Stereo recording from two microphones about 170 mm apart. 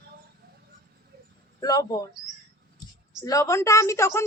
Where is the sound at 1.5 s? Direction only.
20° left (ahead or behind).